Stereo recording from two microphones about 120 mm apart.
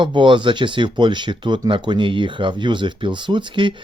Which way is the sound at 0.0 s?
40° right (ahead or behind).